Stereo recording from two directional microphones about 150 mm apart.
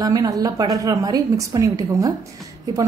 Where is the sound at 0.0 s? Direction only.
25° right (ahead or behind).